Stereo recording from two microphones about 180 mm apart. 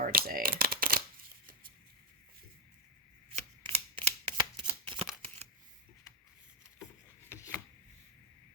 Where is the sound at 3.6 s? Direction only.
30° right (ahead or behind).